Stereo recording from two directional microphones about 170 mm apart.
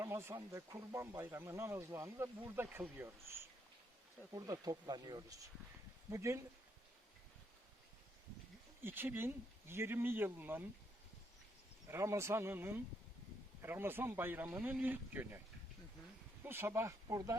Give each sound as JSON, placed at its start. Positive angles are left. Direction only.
{"t": 0.0, "sound": "speech", "side_deg": -15}
{"t": 8.8, "sound": "speech", "side_deg": -10}
{"t": 11.9, "sound": "speech", "side_deg": -15}
{"t": 16.4, "sound": "speech", "side_deg": -15}